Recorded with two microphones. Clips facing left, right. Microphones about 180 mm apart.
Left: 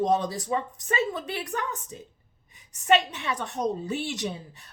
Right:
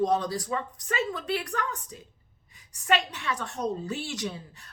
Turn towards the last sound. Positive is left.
turn(degrees=20)  # may be behind; listen again after turning